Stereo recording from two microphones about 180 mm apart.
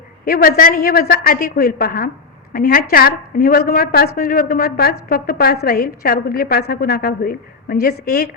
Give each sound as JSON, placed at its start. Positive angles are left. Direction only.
{"t": 0.3, "sound": "a woman's voice", "side_deg": 55}